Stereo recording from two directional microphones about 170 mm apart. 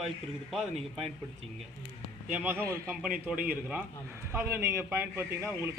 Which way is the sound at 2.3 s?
10° right (ahead or behind).